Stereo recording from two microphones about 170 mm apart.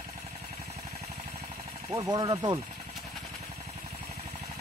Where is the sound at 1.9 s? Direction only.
20° right (ahead or behind).